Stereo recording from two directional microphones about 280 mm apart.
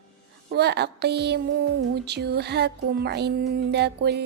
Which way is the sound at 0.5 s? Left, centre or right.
Right.